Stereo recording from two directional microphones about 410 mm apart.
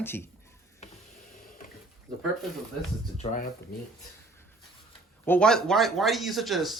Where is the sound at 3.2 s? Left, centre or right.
Centre.